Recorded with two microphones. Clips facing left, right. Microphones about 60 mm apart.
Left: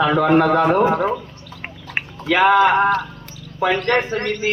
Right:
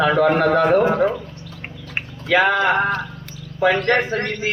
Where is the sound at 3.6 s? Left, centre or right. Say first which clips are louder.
Right 1 dB; centre.